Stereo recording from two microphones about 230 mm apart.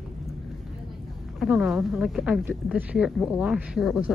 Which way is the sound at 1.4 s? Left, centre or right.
Centre.